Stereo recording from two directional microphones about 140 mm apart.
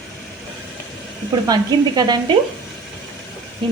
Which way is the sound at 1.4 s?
25° right (ahead or behind).